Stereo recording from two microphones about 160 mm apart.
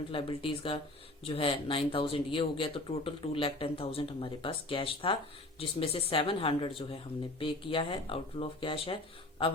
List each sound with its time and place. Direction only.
0.1 s speech: 35° left (ahead or behind)